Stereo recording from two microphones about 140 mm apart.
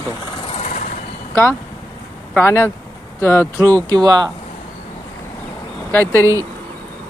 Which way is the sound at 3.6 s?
25° right (ahead or behind).